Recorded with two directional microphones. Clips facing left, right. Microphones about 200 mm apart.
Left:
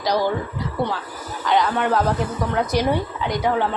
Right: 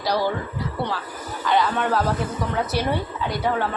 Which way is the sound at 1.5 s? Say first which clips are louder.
Left 2 dB; 15° left (ahead or behind).